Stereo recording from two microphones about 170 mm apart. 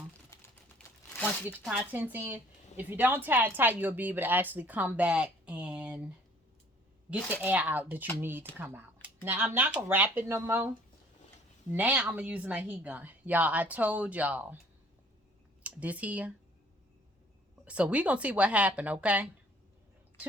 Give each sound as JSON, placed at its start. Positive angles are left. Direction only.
{"t": 0.3, "sound": "typing", "side_deg": 20}
{"t": 1.1, "sound": "crumpling", "side_deg": 10}
{"t": 1.5, "sound": "speech", "side_deg": -10}
{"t": 7.1, "sound": "speech", "side_deg": -10}
{"t": 15.6, "sound": "speech", "side_deg": -10}
{"t": 17.7, "sound": "speech", "side_deg": -5}